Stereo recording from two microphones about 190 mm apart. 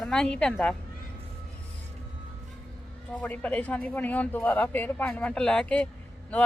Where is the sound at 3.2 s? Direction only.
10° left (ahead or behind).